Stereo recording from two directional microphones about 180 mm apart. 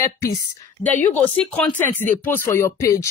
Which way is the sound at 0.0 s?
15° left (ahead or behind).